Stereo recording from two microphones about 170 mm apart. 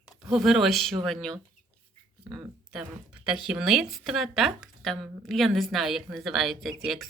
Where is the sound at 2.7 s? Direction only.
5° right (ahead or behind).